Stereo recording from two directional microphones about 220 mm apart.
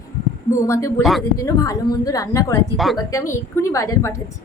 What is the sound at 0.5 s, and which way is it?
A woman's voice, 15° left (ahead or behind).